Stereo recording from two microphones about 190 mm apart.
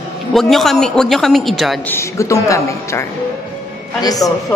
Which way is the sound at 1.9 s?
15° left (ahead or behind).